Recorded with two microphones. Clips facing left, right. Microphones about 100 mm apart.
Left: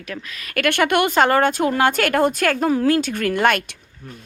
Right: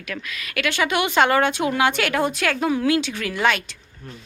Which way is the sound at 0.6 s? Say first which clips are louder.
Left 4 dB; 55° left (ahead or behind).